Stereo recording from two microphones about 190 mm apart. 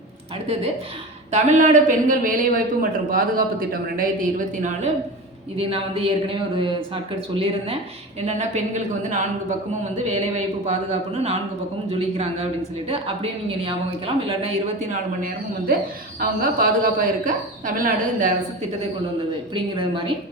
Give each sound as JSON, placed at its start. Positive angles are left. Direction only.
{"t": 1.3, "sound": "speech", "side_deg": -40}
{"t": 5.5, "sound": "a woman's voice", "side_deg": -30}
{"t": 15.2, "sound": "speech", "side_deg": -50}
{"t": 19.7, "sound": "a woman's voice", "side_deg": -25}